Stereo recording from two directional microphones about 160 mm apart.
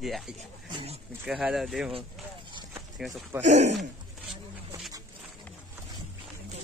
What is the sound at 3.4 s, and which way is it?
Speech, 45° right (ahead or behind).